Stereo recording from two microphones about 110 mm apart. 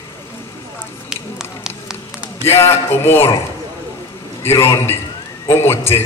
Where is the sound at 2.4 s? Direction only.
25° left (ahead or behind).